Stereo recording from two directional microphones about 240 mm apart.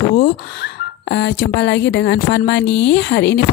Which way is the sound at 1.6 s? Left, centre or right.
Left.